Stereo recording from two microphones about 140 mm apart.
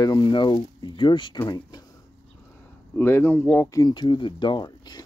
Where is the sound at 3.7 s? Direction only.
30° left (ahead or behind).